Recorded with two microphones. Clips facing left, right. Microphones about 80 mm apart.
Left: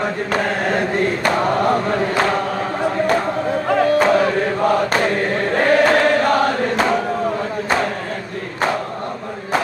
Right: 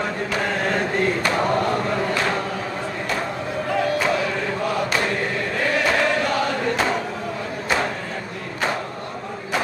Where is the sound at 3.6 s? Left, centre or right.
Left.